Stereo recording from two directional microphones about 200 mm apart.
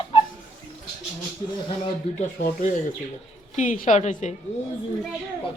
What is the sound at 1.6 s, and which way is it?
Speech, 25° left (ahead or behind).